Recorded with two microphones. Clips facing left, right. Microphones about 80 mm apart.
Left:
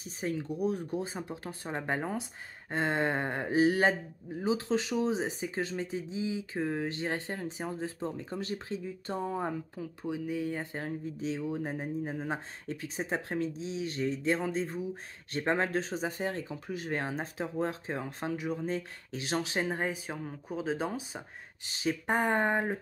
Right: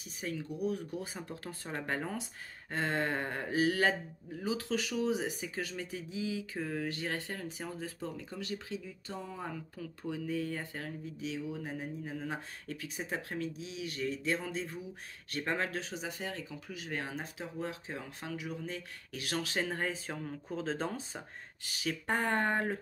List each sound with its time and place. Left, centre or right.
0.2 s speech: left
9.5 s speech: centre
21.6 s speech: left